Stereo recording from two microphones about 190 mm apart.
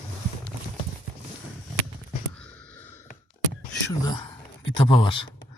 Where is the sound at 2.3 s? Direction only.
5° left (ahead or behind).